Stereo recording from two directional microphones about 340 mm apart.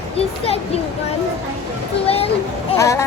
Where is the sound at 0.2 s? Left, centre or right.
Centre.